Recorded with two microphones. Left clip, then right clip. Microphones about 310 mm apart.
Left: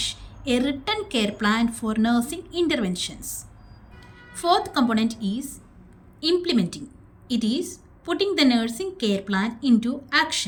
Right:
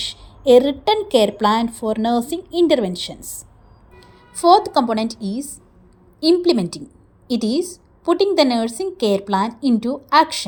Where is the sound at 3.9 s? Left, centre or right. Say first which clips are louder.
Right 8 dB; centre.